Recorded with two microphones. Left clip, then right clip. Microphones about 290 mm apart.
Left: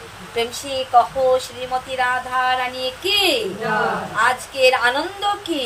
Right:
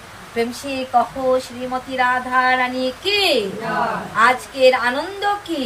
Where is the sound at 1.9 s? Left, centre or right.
Left.